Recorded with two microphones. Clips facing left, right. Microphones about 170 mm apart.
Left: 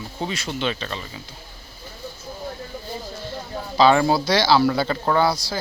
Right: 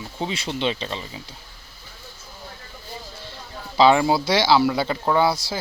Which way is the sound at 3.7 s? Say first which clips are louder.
Even; 20° right (ahead or behind).